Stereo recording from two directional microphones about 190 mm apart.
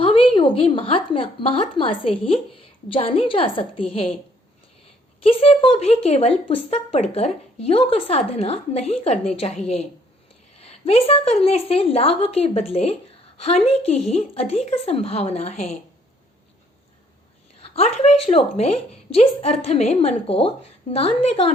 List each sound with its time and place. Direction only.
0.0 s a woman's voice: 30° left (ahead or behind)
5.2 s a woman's voice: 30° left (ahead or behind)
17.6 s a woman's voice: 30° left (ahead or behind)